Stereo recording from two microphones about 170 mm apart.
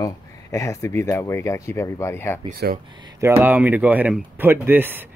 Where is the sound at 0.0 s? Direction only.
20° left (ahead or behind).